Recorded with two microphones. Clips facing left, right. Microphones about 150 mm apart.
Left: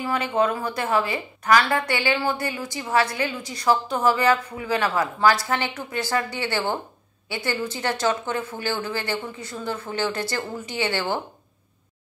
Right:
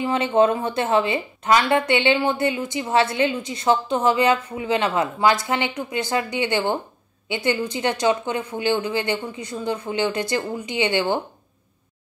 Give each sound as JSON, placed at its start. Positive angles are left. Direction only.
{"t": 0.0, "sound": "a woman's voice", "side_deg": -25}